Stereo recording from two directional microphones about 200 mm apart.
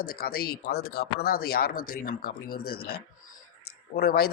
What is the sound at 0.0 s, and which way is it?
Speech, 45° left (ahead or behind).